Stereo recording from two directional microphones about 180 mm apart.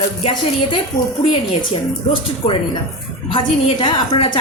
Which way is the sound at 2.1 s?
30° left (ahead or behind).